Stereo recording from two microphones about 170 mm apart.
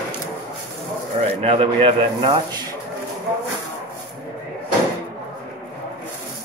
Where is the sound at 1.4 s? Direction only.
30° right (ahead or behind).